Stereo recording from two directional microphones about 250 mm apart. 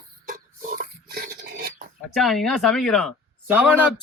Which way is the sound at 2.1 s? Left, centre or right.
Centre.